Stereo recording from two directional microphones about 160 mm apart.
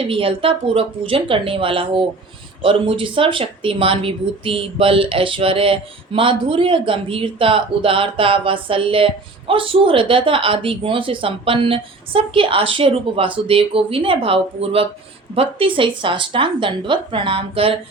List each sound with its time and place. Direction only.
0.0 s speech: 35° right (ahead or behind)